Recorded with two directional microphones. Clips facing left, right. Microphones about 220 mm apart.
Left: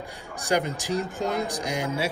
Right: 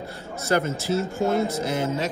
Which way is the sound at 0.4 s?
15° left (ahead or behind).